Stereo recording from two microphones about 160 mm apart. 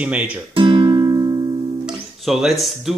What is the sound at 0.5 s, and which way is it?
Music, 30° right (ahead or behind).